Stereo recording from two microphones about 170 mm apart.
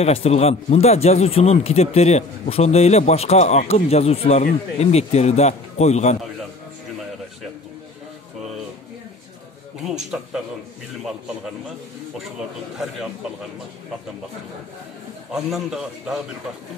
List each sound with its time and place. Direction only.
0.0 s a man's voice: 35° left (ahead or behind)
9.8 s a man's voice: centre (ahead or behind)
15.3 s a man's voice: centre (ahead or behind)